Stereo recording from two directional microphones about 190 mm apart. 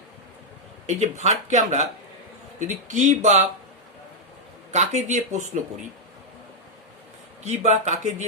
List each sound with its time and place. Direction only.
0.9 s speech: 40° right (ahead or behind)
4.7 s speech: 35° right (ahead or behind)
7.4 s speech: 40° right (ahead or behind)